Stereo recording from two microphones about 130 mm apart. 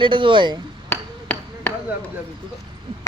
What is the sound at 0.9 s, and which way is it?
Hammer, 15° left (ahead or behind).